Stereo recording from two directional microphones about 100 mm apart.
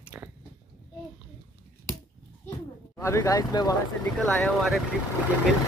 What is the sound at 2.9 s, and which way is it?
Speech, 30° left (ahead or behind).